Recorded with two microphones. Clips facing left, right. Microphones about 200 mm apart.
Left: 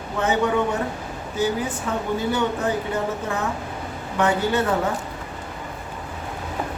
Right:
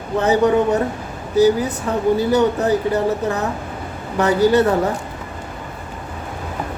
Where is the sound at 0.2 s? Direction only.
35° right (ahead or behind).